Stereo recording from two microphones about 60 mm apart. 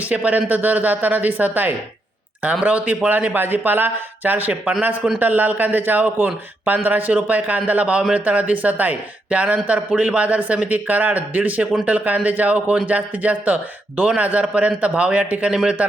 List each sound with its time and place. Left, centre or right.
0.1 s a man's voice: right